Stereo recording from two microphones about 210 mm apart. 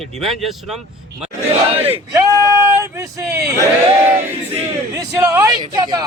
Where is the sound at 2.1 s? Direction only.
15° right (ahead or behind).